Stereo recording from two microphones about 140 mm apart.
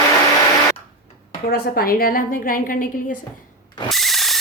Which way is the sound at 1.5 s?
90° left.